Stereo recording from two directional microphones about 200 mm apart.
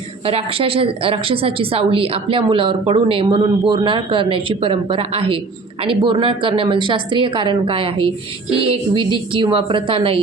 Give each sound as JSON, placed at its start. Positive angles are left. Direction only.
{"t": 0.3, "sound": "a woman's voice", "side_deg": -30}